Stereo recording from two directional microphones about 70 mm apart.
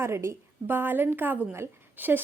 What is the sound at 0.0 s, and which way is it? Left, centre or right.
A woman's voice, right.